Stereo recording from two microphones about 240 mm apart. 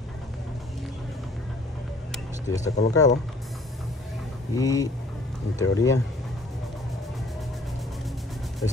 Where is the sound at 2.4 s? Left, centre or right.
Centre.